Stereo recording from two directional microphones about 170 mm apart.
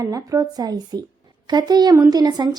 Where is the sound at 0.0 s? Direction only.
20° right (ahead or behind).